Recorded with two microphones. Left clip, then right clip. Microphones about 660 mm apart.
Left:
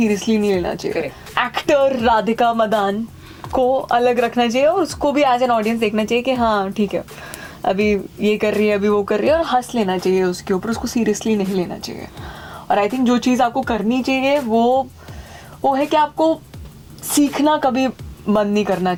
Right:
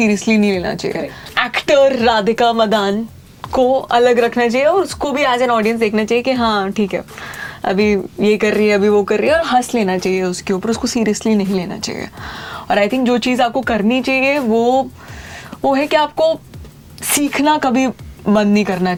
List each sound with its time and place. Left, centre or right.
0.0 s speech: right
17.4 s speech: right